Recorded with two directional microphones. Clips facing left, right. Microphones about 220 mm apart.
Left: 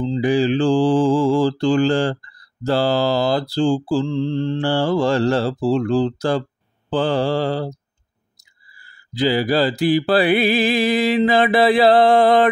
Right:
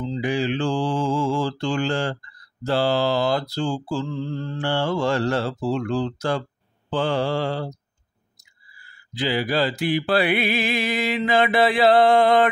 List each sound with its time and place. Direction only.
0.0 s mantra: 35° left (ahead or behind)
8.7 s mantra: 40° left (ahead or behind)